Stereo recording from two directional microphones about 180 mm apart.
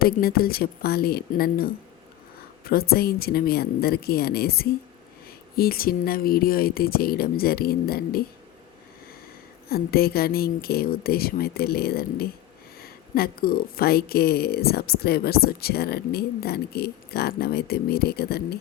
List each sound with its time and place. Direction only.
0.0 s speech: 55° left (ahead or behind)
9.6 s speech: 60° left (ahead or behind)